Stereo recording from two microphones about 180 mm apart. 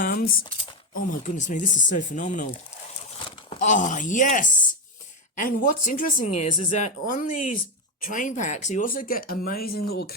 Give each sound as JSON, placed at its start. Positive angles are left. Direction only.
{"t": 0.0, "sound": "a sound", "side_deg": 55}
{"t": 0.9, "sound": "speech", "side_deg": 45}
{"t": 3.6, "sound": "speech", "side_deg": 45}